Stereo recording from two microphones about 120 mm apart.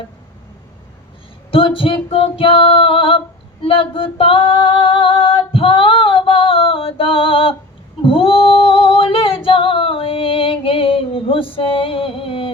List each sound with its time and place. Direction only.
1.5 s female singing: 50° left (ahead or behind)